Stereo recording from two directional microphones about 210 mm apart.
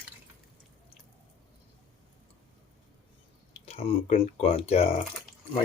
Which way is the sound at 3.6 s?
30° left (ahead or behind).